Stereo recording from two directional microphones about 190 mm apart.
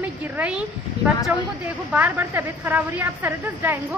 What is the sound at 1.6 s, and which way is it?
A woman's voice, 10° right (ahead or behind).